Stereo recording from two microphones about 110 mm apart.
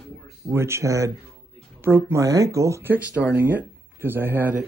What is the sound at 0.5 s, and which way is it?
Speech, 25° right (ahead or behind).